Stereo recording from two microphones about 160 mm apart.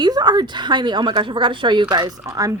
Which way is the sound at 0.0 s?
25° right (ahead or behind).